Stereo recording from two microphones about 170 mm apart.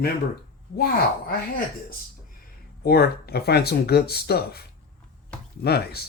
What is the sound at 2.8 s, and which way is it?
Speech, 65° left (ahead or behind).